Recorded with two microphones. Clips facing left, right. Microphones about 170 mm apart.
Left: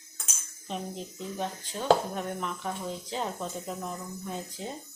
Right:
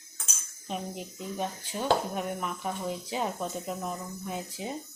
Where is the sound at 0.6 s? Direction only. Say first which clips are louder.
Even; 10° right (ahead or behind).